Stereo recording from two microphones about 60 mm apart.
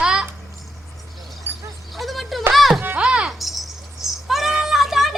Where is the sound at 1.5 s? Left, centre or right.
Right.